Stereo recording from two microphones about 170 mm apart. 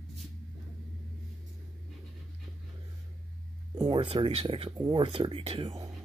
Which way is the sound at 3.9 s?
30° right (ahead or behind).